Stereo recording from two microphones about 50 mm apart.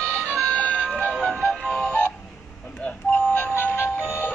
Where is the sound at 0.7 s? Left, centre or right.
Centre.